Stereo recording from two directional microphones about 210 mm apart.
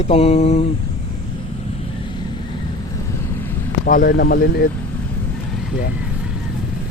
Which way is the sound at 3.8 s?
40° left (ahead or behind).